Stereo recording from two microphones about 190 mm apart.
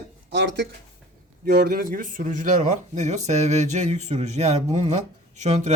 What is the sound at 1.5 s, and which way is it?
Speech, 50° right (ahead or behind).